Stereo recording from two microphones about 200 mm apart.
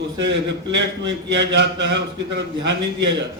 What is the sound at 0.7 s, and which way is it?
A man's voice, 65° right (ahead or behind).